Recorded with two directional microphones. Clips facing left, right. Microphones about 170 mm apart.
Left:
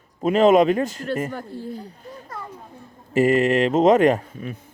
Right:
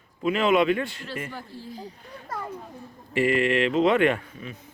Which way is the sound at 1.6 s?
60° left (ahead or behind).